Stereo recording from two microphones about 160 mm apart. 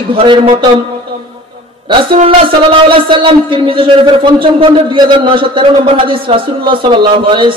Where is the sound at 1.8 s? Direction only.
30° right (ahead or behind).